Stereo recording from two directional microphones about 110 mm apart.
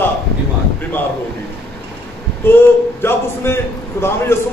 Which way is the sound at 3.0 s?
20° left (ahead or behind).